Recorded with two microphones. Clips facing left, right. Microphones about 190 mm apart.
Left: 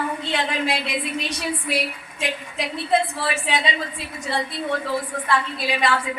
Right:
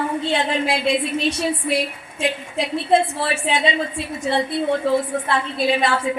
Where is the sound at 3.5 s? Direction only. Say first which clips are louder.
Right 4 dB; 25° right (ahead or behind).